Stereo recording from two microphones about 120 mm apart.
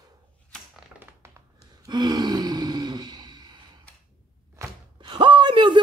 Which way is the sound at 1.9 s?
35° right (ahead or behind).